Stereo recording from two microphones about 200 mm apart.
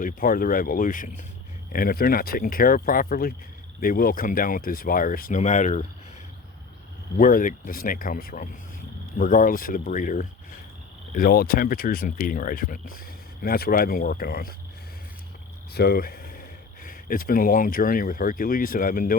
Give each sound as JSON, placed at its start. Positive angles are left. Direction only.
{"t": 0.0, "sound": "speech", "side_deg": 45}
{"t": 7.2, "sound": "speech", "side_deg": 45}
{"t": 15.7, "sound": "speech", "side_deg": 50}